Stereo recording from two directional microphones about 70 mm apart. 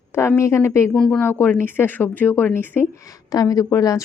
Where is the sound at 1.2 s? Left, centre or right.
Left.